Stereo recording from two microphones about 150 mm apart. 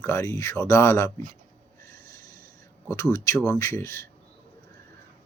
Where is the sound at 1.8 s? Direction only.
20° left (ahead or behind).